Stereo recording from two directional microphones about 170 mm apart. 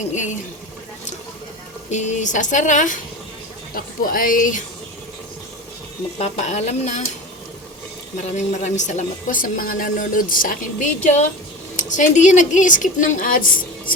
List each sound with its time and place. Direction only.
0.1 s a woman's voice: 45° left (ahead or behind)
1.9 s a woman's voice: 45° left (ahead or behind)
6.1 s speech: 40° left (ahead or behind)
8.1 s a woman's voice: 45° left (ahead or behind)